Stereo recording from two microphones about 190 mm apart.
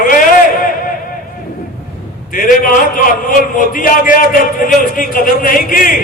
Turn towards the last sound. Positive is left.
turn(degrees=45)  # may be behind; listen again after turning